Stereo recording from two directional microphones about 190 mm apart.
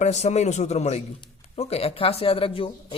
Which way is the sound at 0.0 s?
35° left (ahead or behind).